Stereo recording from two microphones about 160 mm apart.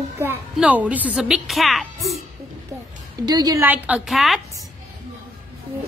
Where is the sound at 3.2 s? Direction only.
25° right (ahead or behind).